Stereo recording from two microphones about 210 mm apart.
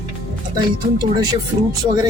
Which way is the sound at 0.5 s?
20° right (ahead or behind).